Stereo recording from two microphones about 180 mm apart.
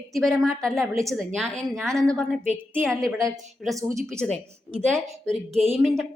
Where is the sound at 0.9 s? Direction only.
15° right (ahead or behind).